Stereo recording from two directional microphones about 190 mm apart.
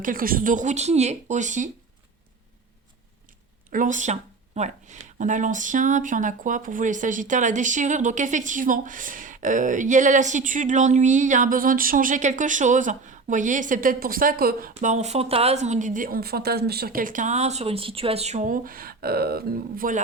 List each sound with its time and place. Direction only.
0.0 s speech: 50° right (ahead or behind)
3.7 s speech: 45° right (ahead or behind)